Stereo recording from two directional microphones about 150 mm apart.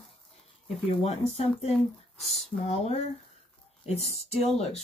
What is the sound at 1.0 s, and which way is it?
Speech, 45° left (ahead or behind).